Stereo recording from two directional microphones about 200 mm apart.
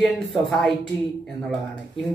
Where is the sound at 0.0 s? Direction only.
5° left (ahead or behind).